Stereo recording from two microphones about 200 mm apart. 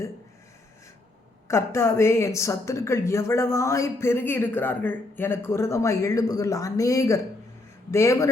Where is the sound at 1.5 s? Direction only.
15° left (ahead or behind).